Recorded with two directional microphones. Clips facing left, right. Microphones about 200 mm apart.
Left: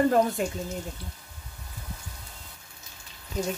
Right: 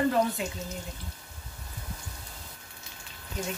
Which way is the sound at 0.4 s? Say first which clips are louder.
Left 5 dB; 45° left (ahead or behind).